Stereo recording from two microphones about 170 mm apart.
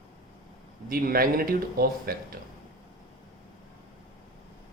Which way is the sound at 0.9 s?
60° right (ahead or behind).